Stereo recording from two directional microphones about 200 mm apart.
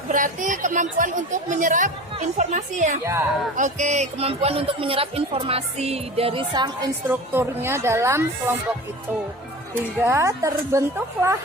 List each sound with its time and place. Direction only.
0.1 s speech: 40° right (ahead or behind)
3.0 s speech: 15° right (ahead or behind)
3.5 s speech: 35° right (ahead or behind); by 6.9 s 20° right (ahead or behind)
7.1 s speech: 10° right (ahead or behind)
10.0 s speech: 15° right (ahead or behind)